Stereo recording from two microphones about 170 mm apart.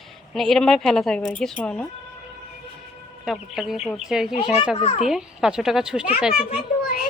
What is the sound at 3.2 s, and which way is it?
Speech, centre (ahead or behind).